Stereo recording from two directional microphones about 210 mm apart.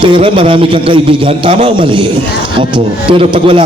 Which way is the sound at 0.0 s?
25° right (ahead or behind).